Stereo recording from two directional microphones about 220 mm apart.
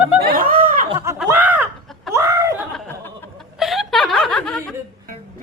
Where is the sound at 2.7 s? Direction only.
10° left (ahead or behind).